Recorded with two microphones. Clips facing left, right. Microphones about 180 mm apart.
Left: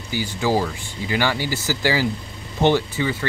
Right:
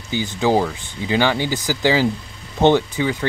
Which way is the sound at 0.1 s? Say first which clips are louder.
Right 3 dB; 20° right (ahead or behind).